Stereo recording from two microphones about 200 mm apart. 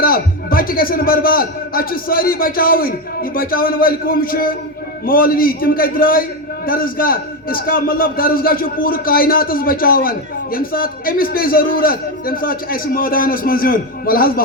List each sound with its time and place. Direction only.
0.0 s a man's voice: 45° left (ahead or behind)